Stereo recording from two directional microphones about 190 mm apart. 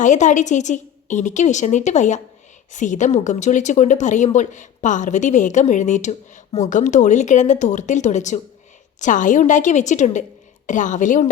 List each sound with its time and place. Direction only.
0.0 s speech: 40° left (ahead or behind)